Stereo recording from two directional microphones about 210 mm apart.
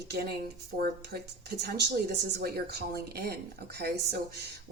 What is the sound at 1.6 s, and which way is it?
Speech, 50° right (ahead or behind).